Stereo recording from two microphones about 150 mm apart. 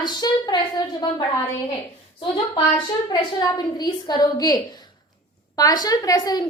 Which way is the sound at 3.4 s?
25° left (ahead or behind).